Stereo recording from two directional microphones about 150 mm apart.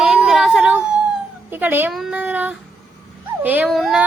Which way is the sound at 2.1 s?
10° right (ahead or behind).